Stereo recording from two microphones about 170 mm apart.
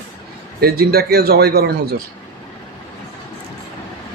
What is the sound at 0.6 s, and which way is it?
A man's voice, 65° right (ahead or behind).